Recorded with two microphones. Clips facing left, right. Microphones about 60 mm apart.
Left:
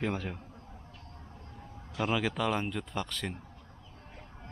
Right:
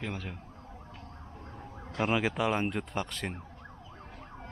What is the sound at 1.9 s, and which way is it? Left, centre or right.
Speech, right.